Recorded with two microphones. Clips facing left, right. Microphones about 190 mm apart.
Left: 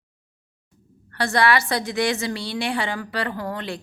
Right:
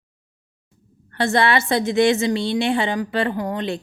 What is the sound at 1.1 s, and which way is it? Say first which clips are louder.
A woman's voice: right 2 dB; 25° right (ahead or behind).